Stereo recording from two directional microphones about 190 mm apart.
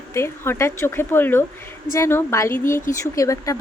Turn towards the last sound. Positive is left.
turn(degrees=15)  # may be behind; listen again after turning